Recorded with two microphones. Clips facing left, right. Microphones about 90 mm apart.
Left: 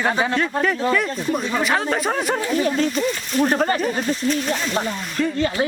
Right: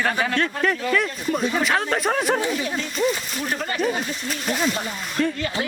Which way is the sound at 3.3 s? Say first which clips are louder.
Left 8 dB; 40° left (ahead or behind).